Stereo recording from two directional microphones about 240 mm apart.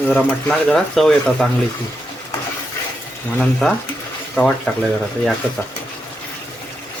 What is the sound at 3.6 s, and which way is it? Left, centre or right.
Speech, centre.